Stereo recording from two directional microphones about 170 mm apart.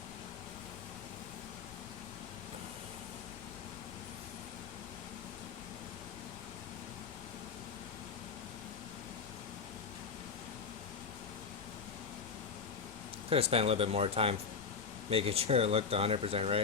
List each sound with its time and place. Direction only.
13.3 s speech: 35° right (ahead or behind)